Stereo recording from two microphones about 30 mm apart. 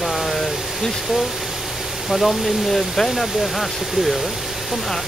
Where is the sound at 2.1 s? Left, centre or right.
Centre.